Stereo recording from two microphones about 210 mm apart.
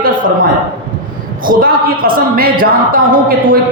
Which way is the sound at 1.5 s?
45° right (ahead or behind).